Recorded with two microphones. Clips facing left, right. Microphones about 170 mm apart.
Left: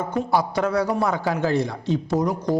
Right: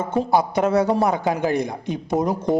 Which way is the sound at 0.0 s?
20° right (ahead or behind).